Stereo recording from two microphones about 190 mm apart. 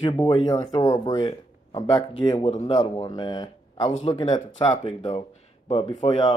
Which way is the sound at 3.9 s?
35° left (ahead or behind).